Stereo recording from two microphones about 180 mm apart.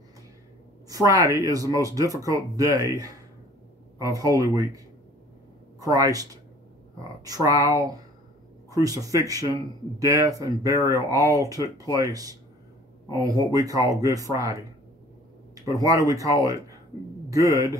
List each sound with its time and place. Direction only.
0.8 s speech: 20° right (ahead or behind)
7.2 s speech: 20° right (ahead or behind)
15.8 s speech: 20° right (ahead or behind)